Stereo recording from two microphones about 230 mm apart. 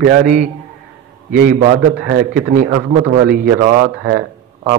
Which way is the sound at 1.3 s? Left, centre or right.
Right.